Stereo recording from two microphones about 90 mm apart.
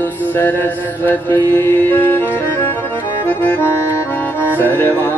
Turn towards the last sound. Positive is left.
turn(degrees=20)  # may be behind; listen again after turning